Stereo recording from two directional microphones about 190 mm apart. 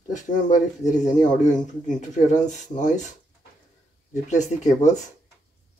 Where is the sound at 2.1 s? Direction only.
40° left (ahead or behind).